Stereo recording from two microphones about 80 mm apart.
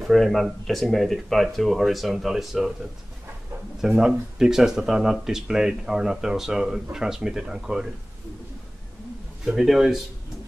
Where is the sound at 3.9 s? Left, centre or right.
Centre.